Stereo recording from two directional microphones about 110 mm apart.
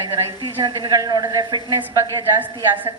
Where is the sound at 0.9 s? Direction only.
35° right (ahead or behind).